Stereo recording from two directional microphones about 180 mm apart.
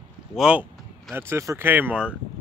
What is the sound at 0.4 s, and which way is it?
Speech, 5° right (ahead or behind).